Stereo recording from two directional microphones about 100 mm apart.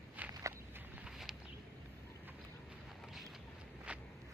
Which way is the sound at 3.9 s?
10° right (ahead or behind).